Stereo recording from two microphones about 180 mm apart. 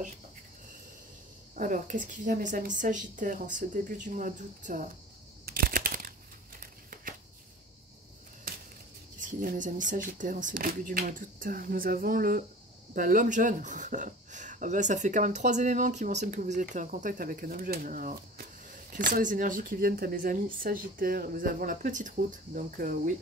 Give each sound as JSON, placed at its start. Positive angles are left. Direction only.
{"t": 1.5, "sound": "speech", "side_deg": -45}
{"t": 5.4, "sound": "a sound", "side_deg": -55}
{"t": 9.2, "sound": "speech", "side_deg": -50}